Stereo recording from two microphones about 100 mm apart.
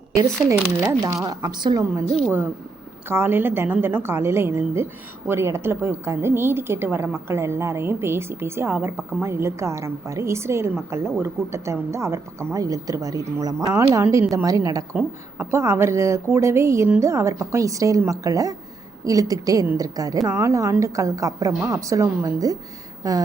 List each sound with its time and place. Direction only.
0.1 s a woman's voice: 30° right (ahead or behind)
1.2 s a woman's voice: 45° right (ahead or behind)
3.1 s a woman's voice: 25° right (ahead or behind); by 13.7 s 40° right (ahead or behind)
13.7 s a woman's voice: 30° right (ahead or behind)